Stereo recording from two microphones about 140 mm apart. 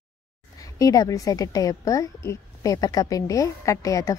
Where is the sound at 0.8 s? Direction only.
25° left (ahead or behind).